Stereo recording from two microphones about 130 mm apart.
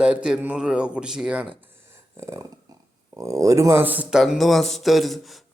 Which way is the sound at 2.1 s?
20° right (ahead or behind).